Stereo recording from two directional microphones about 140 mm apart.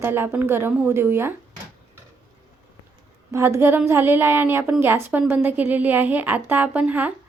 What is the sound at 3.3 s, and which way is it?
A woman's voice, 20° right (ahead or behind).